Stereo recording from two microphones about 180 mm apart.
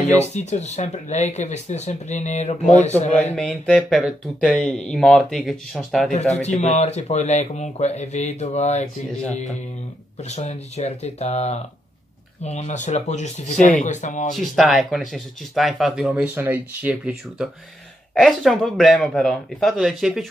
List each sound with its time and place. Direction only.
0.3 s speech: 40° left (ahead or behind)
3.3 s speech: 5° left (ahead or behind)
6.4 s speech: 40° left (ahead or behind)
14.3 s speech: centre (ahead or behind)